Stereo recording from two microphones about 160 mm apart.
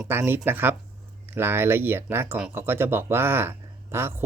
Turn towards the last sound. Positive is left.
turn(degrees=-15)  # may be behind; listen again after turning